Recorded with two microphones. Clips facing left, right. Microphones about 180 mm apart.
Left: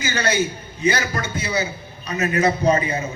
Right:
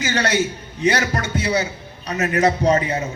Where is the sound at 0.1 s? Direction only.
75° right (ahead or behind).